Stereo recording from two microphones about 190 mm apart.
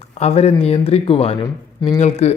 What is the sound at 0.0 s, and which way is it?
Speech, 35° left (ahead or behind).